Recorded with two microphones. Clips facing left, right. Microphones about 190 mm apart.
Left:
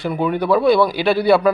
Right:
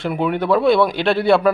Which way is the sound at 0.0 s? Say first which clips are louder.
Even; centre (ahead or behind).